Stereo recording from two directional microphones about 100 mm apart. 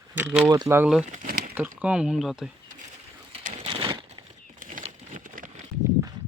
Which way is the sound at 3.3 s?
65° right (ahead or behind).